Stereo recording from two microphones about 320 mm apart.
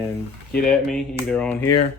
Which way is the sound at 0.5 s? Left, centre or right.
Centre.